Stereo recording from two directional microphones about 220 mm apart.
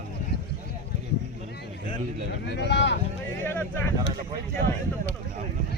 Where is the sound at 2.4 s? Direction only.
50° left (ahead or behind).